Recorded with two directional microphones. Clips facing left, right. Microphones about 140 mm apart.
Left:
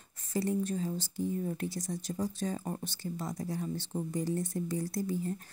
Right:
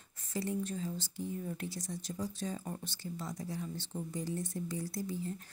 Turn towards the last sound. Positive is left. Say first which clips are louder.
# left 5 dB
turn(degrees=45)  # may be behind; listen again after turning